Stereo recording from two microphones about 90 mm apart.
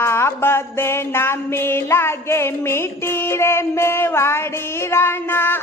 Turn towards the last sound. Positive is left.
turn(degrees=25)  # may be behind; listen again after turning